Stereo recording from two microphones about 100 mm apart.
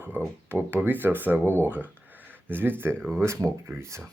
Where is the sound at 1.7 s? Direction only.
15° right (ahead or behind).